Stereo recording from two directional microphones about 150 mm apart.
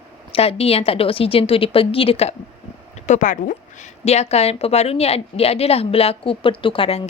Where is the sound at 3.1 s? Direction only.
55° left (ahead or behind); by 7.1 s 35° left (ahead or behind).